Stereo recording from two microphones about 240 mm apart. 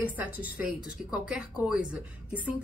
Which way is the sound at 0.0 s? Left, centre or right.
Centre.